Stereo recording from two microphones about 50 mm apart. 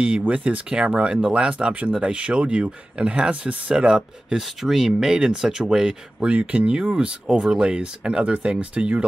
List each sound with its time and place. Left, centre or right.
0.3 s speech: right
4.4 s speech: centre; by 9.0 s right